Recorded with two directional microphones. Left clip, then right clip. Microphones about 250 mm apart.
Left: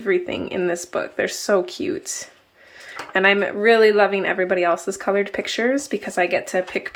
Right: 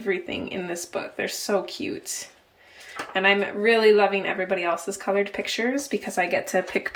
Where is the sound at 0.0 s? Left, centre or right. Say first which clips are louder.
Left 6 dB; centre.